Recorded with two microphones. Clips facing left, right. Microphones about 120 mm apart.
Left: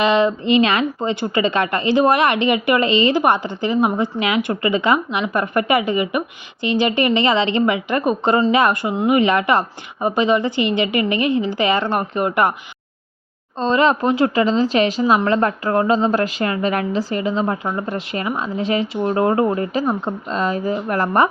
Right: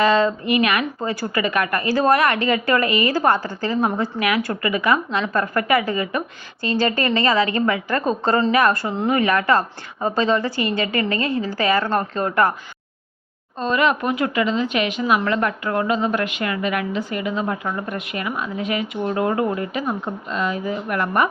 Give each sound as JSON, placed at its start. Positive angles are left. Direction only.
{"t": 0.0, "sound": "speech", "side_deg": 20}
{"t": 13.6, "sound": "speech", "side_deg": 30}